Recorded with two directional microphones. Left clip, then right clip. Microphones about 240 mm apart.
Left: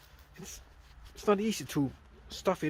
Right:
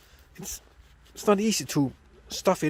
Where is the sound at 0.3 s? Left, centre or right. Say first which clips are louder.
Right 8 dB; right.